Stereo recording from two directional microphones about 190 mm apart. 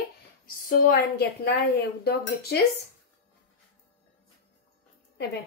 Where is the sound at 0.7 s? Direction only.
55° left (ahead or behind).